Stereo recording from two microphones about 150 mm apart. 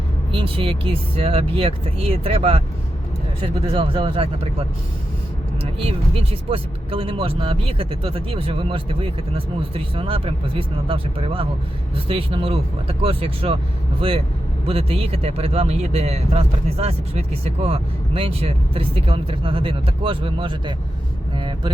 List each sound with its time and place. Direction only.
0.3 s speech: 35° right (ahead or behind)
5.8 s speech: 40° right (ahead or behind)
21.3 s vehicle: 30° right (ahead or behind)